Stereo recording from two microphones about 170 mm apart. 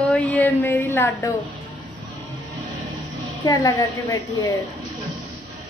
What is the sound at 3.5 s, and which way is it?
Speech, 20° left (ahead or behind).